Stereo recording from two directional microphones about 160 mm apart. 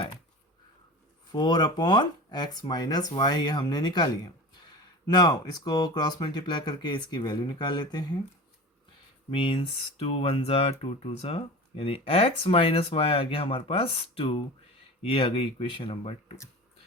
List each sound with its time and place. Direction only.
1.3 s speech: 25° left (ahead or behind)
9.3 s speech: 35° left (ahead or behind)